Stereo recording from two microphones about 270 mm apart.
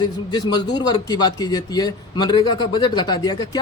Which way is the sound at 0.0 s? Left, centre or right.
Centre.